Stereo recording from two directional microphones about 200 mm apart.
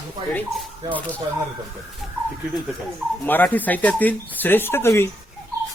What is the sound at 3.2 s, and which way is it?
Speech, 10° left (ahead or behind).